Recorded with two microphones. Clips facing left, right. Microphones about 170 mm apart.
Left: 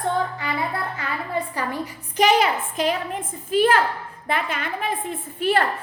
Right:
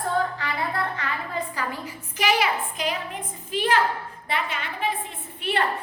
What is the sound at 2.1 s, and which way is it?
A woman's voice, 40° left (ahead or behind).